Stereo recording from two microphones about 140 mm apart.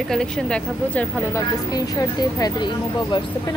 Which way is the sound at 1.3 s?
20° left (ahead or behind).